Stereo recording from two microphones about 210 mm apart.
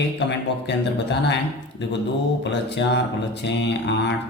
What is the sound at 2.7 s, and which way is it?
Mantra, 55° left (ahead or behind).